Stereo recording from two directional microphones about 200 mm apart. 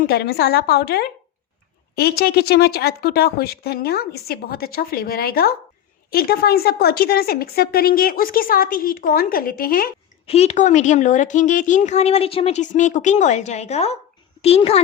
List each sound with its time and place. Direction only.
0.0 s a woman's voice: 50° left (ahead or behind)
10.2 s a woman's voice: 30° left (ahead or behind)